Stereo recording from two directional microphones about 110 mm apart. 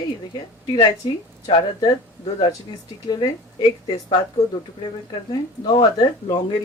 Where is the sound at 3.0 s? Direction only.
40° left (ahead or behind).